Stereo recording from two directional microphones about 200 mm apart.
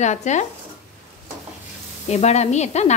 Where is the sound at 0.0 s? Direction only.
35° left (ahead or behind).